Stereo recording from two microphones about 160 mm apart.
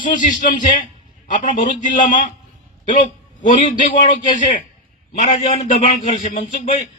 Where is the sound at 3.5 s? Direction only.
55° left (ahead or behind).